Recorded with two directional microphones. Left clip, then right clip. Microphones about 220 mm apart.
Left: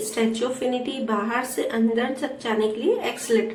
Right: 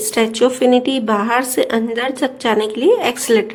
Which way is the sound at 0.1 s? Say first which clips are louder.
Right 11 dB; 50° right (ahead or behind).